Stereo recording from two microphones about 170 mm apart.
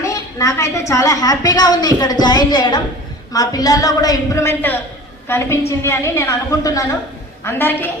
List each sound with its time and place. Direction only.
0.0 s a woman's voice: 20° left (ahead or behind)